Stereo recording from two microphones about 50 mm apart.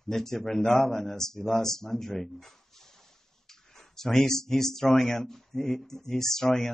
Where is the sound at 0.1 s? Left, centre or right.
Centre.